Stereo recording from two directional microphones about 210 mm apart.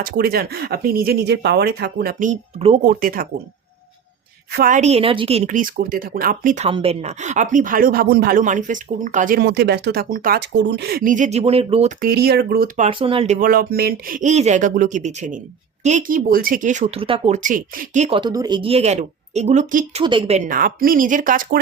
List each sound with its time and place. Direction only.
0.0 s speech: 45° right (ahead or behind)
2.8 s speech: 40° right (ahead or behind)
4.5 s speech: 40° right (ahead or behind)
6.7 s speech: 25° right (ahead or behind)
12.9 s speech: 25° right (ahead or behind)
18.2 s speech: 20° right (ahead or behind); by 21.6 s 40° right (ahead or behind)